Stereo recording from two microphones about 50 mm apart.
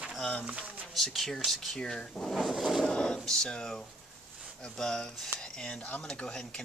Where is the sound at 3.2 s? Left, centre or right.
Centre.